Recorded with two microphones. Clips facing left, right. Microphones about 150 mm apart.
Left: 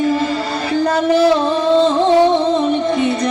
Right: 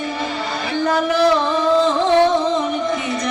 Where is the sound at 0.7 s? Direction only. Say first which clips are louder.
Left 3 dB; 35° left (ahead or behind).